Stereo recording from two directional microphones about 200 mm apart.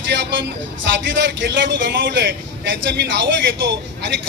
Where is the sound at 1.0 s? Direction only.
65° right (ahead or behind).